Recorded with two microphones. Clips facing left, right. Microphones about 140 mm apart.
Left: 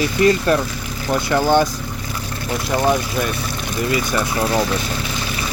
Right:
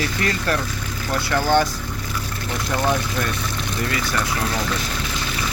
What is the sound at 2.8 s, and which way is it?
Speech, 15° left (ahead or behind).